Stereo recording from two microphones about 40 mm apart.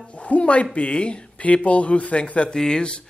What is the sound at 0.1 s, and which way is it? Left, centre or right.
Speech, left.